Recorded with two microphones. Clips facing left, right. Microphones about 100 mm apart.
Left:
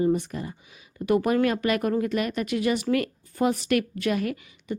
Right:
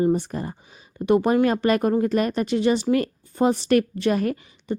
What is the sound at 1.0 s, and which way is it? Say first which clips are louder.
A woman's voice: right 3 dB; 25° right (ahead or behind).